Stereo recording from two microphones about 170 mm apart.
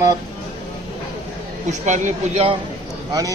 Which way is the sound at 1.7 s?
45° right (ahead or behind).